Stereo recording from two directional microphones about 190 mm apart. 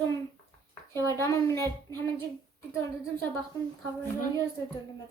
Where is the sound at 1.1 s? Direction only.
15° left (ahead or behind).